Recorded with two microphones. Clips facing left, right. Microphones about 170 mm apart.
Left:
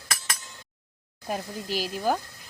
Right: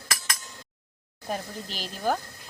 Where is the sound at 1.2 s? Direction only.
5° left (ahead or behind).